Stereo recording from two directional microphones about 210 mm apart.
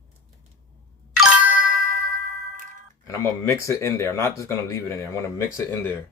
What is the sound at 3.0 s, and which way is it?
Speech, 15° left (ahead or behind).